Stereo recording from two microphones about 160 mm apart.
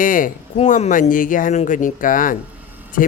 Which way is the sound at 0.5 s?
45° left (ahead or behind).